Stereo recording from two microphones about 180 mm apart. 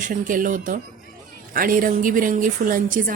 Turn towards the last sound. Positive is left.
turn(degrees=-50)  # may be behind; listen again after turning